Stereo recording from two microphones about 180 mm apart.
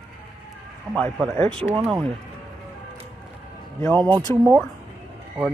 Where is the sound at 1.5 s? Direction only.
30° right (ahead or behind).